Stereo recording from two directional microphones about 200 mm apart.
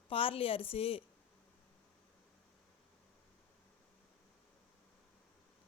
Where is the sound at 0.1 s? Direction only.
30° left (ahead or behind).